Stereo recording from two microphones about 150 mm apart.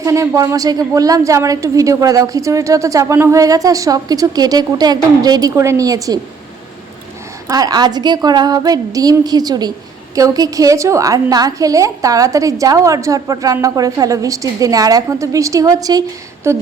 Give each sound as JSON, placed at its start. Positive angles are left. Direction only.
{"t": 0.0, "sound": "a woman's voice", "side_deg": -20}
{"t": 7.4, "sound": "a woman's voice", "side_deg": -25}